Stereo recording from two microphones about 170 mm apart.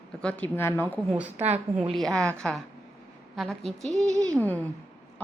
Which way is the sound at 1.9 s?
5° left (ahead or behind).